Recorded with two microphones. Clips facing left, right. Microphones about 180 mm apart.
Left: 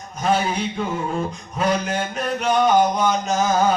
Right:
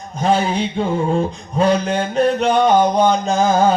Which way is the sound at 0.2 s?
30° right (ahead or behind).